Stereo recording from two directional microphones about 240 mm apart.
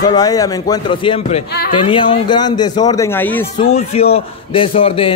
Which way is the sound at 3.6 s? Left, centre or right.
Left.